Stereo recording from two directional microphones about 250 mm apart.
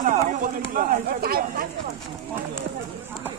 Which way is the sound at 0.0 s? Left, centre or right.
Right.